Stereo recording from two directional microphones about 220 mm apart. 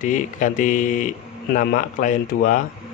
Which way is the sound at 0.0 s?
35° left (ahead or behind).